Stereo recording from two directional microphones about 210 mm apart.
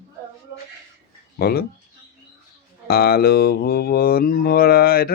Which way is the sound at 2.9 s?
45° left (ahead or behind).